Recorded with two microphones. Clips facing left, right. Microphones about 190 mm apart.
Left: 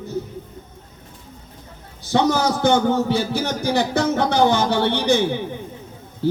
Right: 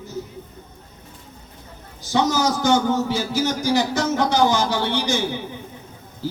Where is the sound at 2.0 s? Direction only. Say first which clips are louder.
Left 2 dB; 60° left (ahead or behind).